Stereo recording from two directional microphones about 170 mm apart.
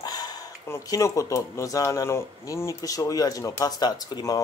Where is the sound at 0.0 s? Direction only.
20° left (ahead or behind).